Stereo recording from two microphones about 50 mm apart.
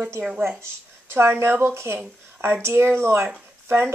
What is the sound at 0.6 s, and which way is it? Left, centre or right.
A woman's voice, right.